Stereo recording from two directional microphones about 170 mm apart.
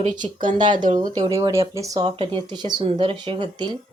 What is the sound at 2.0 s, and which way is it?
Speech, 30° right (ahead or behind).